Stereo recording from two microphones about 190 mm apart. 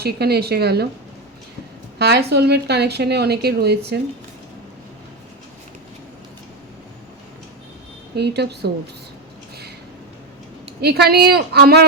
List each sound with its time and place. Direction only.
0.0 s speech: 55° right (ahead or behind)
2.0 s speech: 60° right (ahead or behind)
8.1 s speech: 60° right (ahead or behind)
10.8 s speech: 60° right (ahead or behind)